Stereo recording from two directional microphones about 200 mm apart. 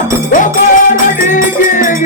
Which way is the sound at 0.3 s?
40° left (ahead or behind).